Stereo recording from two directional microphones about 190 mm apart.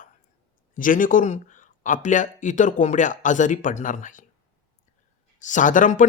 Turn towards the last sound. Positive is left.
turn(degrees=45)  # may be behind; listen again after turning